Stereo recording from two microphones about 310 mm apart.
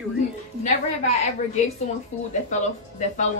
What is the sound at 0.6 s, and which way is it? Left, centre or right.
A woman's voice, left.